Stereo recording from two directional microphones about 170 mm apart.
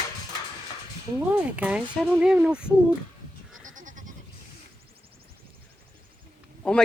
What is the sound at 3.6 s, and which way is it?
Goat, 50° right (ahead or behind).